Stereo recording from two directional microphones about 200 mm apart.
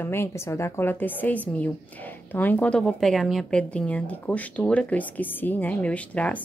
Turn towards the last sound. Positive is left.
turn(degrees=5)  # may be behind; listen again after turning